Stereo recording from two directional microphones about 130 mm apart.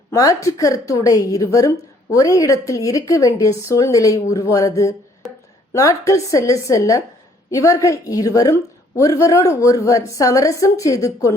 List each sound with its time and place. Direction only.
0.1 s a woman's voice: 25° left (ahead or behind)
5.2 s a sound: centre (ahead or behind)
5.7 s a woman's voice: 25° left (ahead or behind)